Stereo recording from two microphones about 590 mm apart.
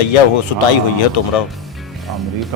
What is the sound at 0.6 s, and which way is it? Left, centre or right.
Speech, left.